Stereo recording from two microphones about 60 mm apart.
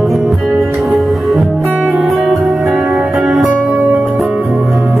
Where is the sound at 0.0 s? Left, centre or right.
Centre.